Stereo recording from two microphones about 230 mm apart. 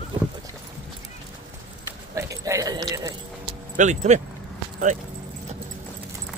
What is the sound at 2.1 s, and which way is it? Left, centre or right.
Speech, centre.